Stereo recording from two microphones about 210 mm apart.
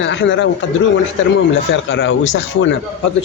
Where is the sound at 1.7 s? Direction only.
65° left (ahead or behind).